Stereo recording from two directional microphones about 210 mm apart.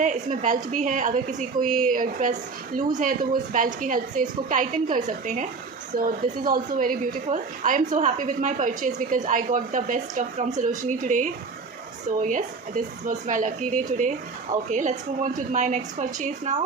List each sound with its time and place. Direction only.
0.0 s speech: 35° right (ahead or behind)